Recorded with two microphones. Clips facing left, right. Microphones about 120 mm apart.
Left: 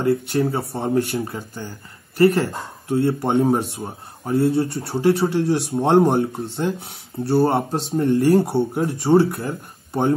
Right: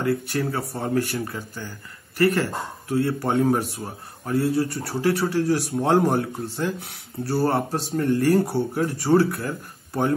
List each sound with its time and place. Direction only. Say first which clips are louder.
0.4 s speech: left 5 dB; 25° left (ahead or behind)